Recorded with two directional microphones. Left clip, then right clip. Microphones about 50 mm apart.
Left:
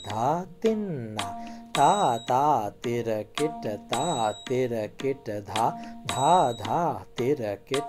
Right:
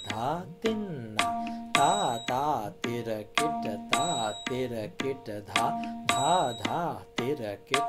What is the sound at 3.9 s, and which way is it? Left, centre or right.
Mantra, right.